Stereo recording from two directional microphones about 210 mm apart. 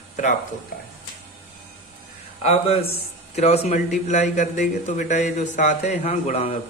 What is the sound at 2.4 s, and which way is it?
A man's voice, 30° left (ahead or behind).